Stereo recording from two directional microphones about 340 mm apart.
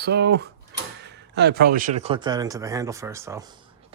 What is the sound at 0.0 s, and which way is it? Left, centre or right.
Speech, right.